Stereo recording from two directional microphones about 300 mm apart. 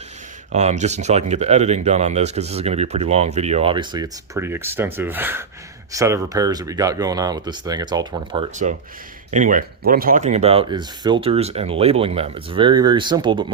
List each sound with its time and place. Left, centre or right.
0.5 s speech: right